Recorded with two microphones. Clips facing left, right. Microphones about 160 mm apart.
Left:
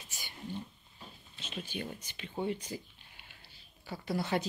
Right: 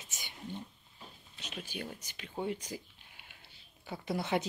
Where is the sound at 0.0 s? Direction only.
20° right (ahead or behind).